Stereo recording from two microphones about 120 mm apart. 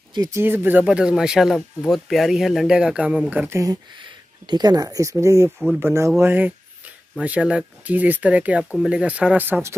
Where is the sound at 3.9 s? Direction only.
40° right (ahead or behind).